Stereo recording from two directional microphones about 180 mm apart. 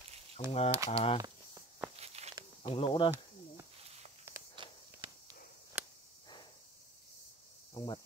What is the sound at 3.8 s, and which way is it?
Walk, 35° right (ahead or behind).